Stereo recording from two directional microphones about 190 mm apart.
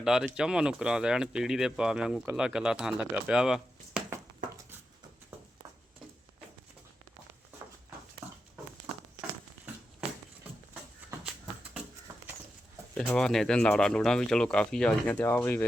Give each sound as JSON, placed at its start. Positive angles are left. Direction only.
{"t": 0.0, "sound": "speech", "side_deg": -5}
{"t": 8.2, "sound": "a sound", "side_deg": -15}
{"t": 12.9, "sound": "speech", "side_deg": 5}